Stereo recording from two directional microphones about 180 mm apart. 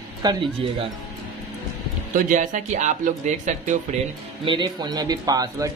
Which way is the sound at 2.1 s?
45° right (ahead or behind).